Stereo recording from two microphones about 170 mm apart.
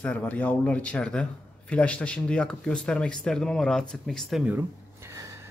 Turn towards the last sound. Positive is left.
turn(degrees=-20)  # may be behind; listen again after turning